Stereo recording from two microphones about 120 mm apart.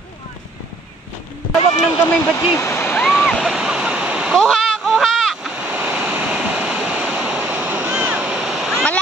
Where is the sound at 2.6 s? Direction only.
15° left (ahead or behind).